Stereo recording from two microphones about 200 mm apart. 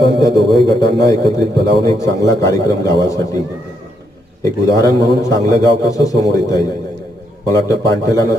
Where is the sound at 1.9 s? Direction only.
15° left (ahead or behind).